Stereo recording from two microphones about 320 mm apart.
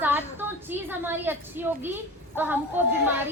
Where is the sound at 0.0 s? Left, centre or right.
Centre.